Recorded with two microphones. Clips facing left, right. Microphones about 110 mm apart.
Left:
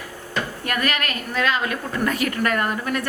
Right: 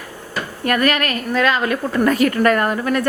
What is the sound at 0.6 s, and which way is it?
A woman's voice, 50° right (ahead or behind).